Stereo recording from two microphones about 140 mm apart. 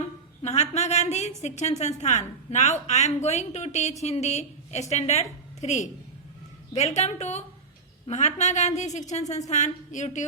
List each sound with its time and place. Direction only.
0.4 s a woman's voice: 50° left (ahead or behind)